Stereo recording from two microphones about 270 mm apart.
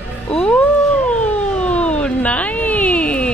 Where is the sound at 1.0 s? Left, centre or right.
Centre.